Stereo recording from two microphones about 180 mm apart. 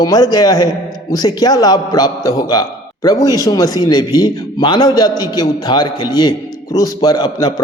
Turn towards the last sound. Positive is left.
turn(degrees=20)  # may be behind; listen again after turning